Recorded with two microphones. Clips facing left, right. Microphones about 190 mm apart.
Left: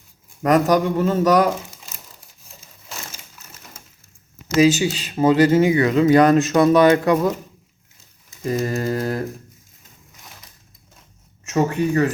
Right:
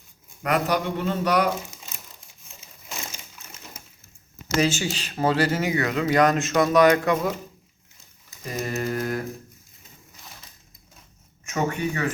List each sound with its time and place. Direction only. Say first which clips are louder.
0.4 s speech: left 7 dB; 40° left (ahead or behind)
4.6 s speech: left 10 dB; 15° left (ahead or behind); by 7.2 s 30° left (ahead or behind)
8.7 s speech: left 4 dB; 35° left (ahead or behind)
11.5 s speech: left 7 dB; 35° left (ahead or behind)